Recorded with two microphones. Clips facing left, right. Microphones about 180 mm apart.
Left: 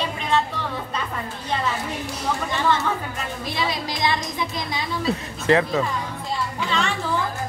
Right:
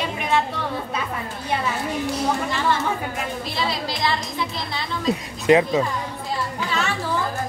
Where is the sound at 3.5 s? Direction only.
15° left (ahead or behind).